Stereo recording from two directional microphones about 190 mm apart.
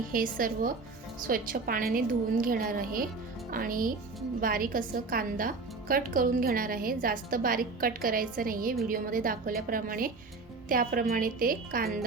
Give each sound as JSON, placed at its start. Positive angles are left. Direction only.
{"t": 0.1, "sound": "a woman's voice", "side_deg": -45}